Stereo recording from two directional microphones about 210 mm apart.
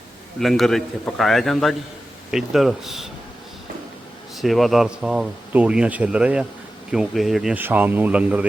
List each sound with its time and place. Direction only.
0.3 s speech: centre (ahead or behind)
4.4 s speech: centre (ahead or behind)